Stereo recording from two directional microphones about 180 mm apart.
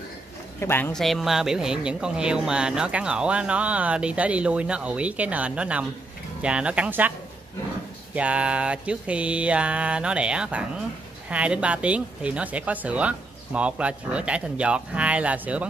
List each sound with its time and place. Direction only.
0.6 s speech: 10° left (ahead or behind)
0.9 s speech: centre (ahead or behind)